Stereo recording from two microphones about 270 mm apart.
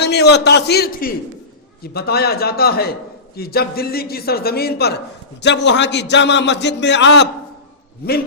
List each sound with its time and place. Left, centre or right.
0.0 s a man's voice: left